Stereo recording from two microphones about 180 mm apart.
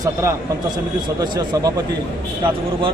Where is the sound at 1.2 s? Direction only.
20° right (ahead or behind).